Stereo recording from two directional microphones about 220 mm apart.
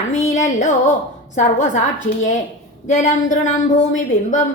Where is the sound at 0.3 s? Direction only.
35° left (ahead or behind).